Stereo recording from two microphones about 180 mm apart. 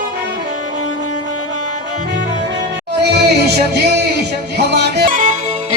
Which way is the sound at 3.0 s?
65° right (ahead or behind).